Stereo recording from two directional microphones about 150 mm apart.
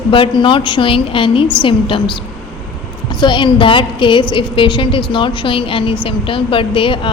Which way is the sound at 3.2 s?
30° left (ahead or behind).